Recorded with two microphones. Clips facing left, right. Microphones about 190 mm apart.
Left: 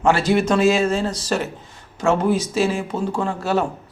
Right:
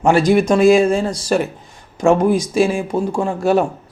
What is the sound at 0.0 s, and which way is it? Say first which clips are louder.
Speech: right 4 dB; 15° right (ahead or behind).